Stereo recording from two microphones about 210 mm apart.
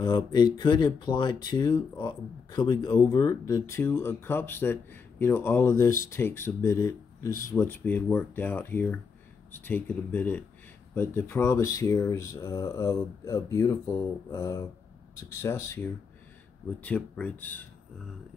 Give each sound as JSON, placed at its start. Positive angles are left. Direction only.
{"t": 0.0, "sound": "speech", "side_deg": 20}
{"t": 16.8, "sound": "speech", "side_deg": 5}